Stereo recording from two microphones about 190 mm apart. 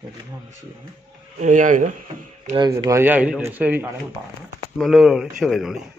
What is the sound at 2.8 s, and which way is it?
A man's voice, 15° right (ahead or behind).